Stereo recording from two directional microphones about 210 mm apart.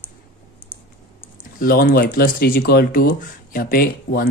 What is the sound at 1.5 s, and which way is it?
Speech, 45° left (ahead or behind).